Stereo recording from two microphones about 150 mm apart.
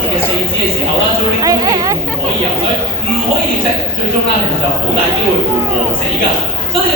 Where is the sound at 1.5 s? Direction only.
25° right (ahead or behind).